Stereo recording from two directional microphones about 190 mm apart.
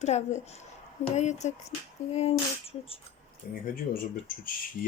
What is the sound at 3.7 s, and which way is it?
Speech, 50° left (ahead or behind).